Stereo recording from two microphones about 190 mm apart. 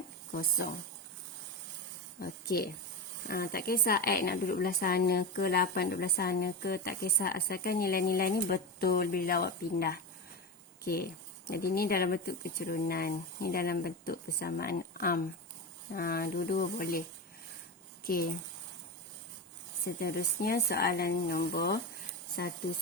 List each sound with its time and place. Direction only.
0.6 s a woman's voice: 50° left (ahead or behind)
2.2 s a woman's voice: 50° left (ahead or behind)
18.0 s speech: 50° left (ahead or behind)
20.0 s a woman's voice: 50° left (ahead or behind)